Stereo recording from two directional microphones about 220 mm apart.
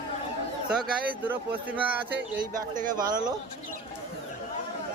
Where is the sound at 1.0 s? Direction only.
10° right (ahead or behind).